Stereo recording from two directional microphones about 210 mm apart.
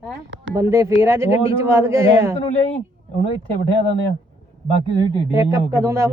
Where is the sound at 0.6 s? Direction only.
15° right (ahead or behind).